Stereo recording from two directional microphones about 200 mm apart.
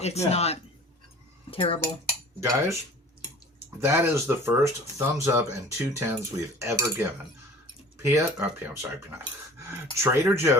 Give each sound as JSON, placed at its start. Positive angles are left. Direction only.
{"t": 0.0, "sound": "a man's voice", "side_deg": 30}
{"t": 2.4, "sound": "speech", "side_deg": -15}
{"t": 3.8, "sound": "speech", "side_deg": -10}